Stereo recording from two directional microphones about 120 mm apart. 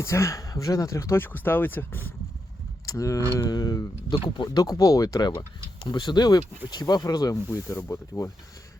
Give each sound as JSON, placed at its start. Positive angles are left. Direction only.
{"t": 0.0, "sound": "speech", "side_deg": 25}
{"t": 2.8, "sound": "speech", "side_deg": 25}